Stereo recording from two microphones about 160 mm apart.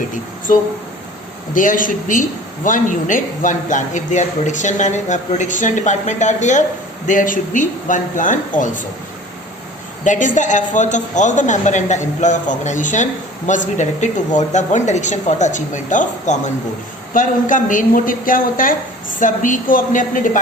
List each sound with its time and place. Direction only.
1.5 s a woman's voice: 55° left (ahead or behind)
10.0 s a man's voice: 50° left (ahead or behind)